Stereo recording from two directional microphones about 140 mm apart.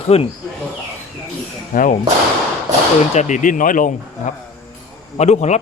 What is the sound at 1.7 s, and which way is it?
Speech, 75° left (ahead or behind).